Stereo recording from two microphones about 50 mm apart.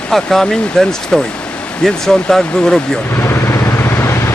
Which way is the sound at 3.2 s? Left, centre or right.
Left.